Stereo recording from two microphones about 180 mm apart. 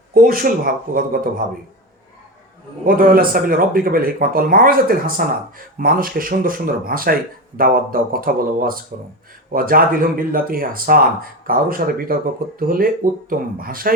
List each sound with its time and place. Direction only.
0.1 s speech: 55° right (ahead or behind)
2.8 s speech: 55° right (ahead or behind)